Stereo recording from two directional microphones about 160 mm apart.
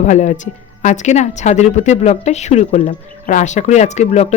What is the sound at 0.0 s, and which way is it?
A woman's voice, 50° left (ahead or behind).